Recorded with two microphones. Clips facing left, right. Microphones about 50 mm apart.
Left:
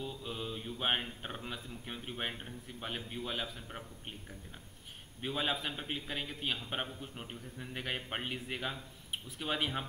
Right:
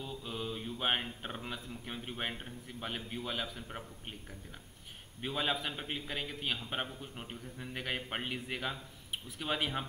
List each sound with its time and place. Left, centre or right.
0.0 s a man's voice: centre
5.2 s a man's voice: centre